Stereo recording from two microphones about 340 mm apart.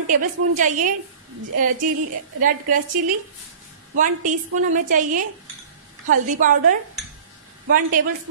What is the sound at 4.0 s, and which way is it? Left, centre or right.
A woman's voice, right.